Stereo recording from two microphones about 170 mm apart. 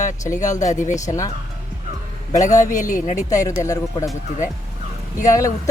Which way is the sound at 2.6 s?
50° left (ahead or behind).